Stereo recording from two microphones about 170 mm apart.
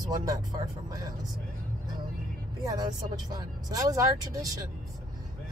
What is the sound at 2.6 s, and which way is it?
Speech, 20° right (ahead or behind).